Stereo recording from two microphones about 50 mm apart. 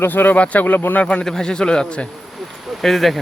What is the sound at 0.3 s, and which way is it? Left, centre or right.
Speech, left.